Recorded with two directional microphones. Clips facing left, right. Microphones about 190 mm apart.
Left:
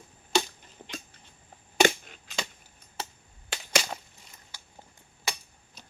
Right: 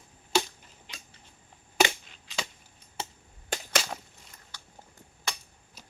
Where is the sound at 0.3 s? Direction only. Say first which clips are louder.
Left 1 dB; 5° right (ahead or behind).